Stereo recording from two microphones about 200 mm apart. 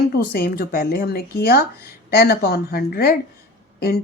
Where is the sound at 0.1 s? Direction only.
50° left (ahead or behind).